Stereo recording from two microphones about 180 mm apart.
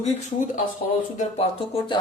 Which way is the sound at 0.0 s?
40° left (ahead or behind).